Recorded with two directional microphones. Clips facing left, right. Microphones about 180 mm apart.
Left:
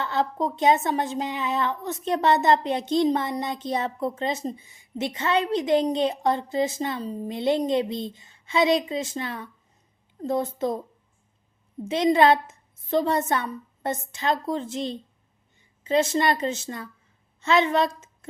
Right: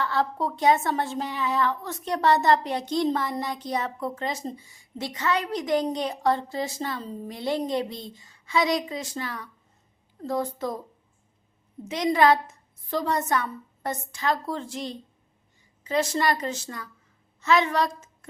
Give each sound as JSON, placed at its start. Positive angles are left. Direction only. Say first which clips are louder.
{"t": 0.0, "sound": "a woman's voice", "louder": "left 1 dB", "side_deg": 20}
{"t": 11.9, "sound": "a woman's voice", "louder": "left 2 dB", "side_deg": 25}